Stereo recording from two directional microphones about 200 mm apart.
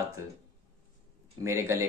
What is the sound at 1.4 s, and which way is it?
Speech, 15° right (ahead or behind).